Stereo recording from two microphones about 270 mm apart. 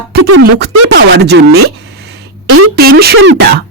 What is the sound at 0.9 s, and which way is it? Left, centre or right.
Music, right.